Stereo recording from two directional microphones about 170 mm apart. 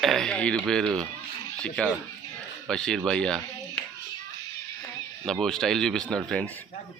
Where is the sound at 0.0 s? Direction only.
Centre (ahead or behind).